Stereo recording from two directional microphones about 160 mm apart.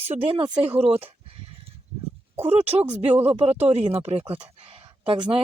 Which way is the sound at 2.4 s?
40° right (ahead or behind).